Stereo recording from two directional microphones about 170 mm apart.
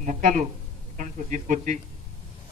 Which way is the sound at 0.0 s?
45° right (ahead or behind).